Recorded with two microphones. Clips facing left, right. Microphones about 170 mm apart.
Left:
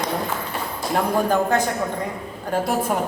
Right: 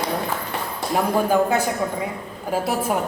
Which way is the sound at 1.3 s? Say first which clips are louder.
Right 2 dB; 10° right (ahead or behind).